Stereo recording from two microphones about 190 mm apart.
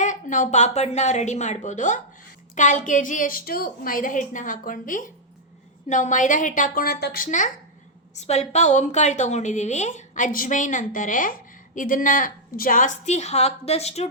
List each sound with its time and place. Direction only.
0.0 s a woman's voice: 40° left (ahead or behind)